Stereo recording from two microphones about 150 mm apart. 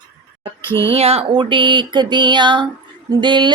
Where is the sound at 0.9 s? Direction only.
40° right (ahead or behind).